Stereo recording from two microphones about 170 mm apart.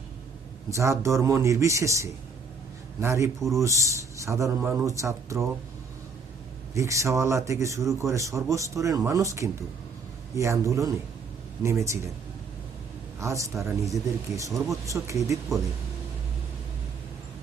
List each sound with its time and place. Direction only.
0.7 s speech: 15° right (ahead or behind)
6.7 s speech: 20° right (ahead or behind)
13.1 s speech: 15° right (ahead or behind)